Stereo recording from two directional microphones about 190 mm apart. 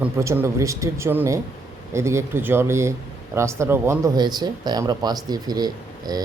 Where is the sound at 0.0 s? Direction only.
10° right (ahead or behind).